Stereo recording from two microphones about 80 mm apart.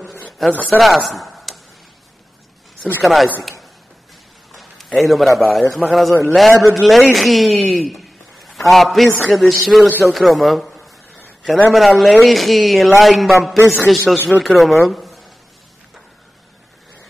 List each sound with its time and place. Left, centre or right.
0.4 s a man's voice: centre
3.0 s a man's voice: centre
4.5 s a man's voice: centre
7.7 s a sound: centre
9.2 s a man's voice: centre
9.8 s a man's voice: right
10.1 s a man's voice: centre